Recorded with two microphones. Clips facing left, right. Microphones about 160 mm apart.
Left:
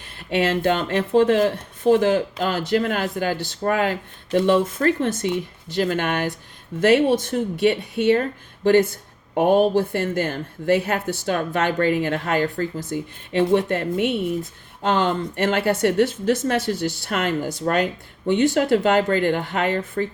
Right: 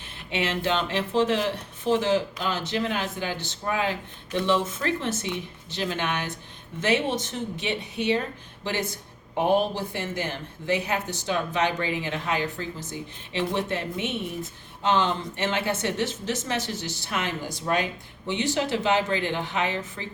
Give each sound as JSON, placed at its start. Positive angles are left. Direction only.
{"t": 0.3, "sound": "speech", "side_deg": 50}
{"t": 3.3, "sound": "speech", "side_deg": -20}
{"t": 3.6, "sound": "speech", "side_deg": 50}
{"t": 9.4, "sound": "speech", "side_deg": 50}